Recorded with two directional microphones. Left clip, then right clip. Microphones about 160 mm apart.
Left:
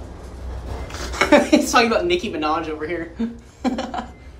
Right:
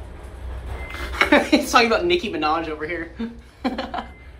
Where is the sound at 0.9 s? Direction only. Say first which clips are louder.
Left 2 dB; 35° left (ahead or behind).